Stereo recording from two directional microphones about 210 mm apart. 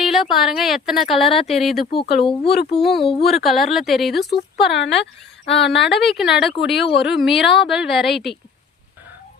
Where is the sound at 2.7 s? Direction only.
50° left (ahead or behind).